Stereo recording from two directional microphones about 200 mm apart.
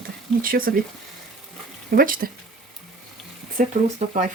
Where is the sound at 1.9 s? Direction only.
45° right (ahead or behind).